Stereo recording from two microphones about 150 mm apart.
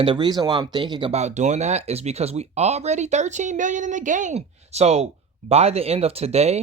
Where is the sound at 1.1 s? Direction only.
50° right (ahead or behind).